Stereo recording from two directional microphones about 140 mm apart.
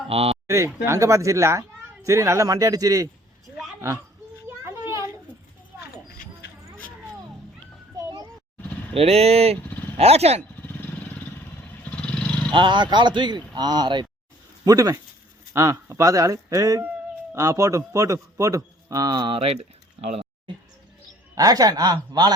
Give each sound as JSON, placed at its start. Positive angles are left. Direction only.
{"t": 0.1, "sound": "speech", "side_deg": -45}
{"t": 0.4, "sound": "a man's voice", "side_deg": -20}
{"t": 4.4, "sound": "children playing", "side_deg": -20}
{"t": 5.7, "sound": "vehicle", "side_deg": -15}
{"t": 7.9, "sound": "a sound", "side_deg": -25}
{"t": 9.0, "sound": "speech", "side_deg": -45}
{"t": 10.6, "sound": "vehicle", "side_deg": 15}
{"t": 12.5, "sound": "a man's voice", "side_deg": -35}
{"t": 21.3, "sound": "a man's voice", "side_deg": -25}